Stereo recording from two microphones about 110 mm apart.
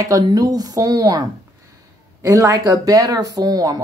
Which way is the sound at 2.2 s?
30° right (ahead or behind).